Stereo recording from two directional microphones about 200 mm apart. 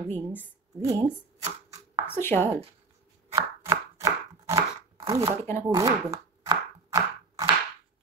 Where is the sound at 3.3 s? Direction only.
15° right (ahead or behind).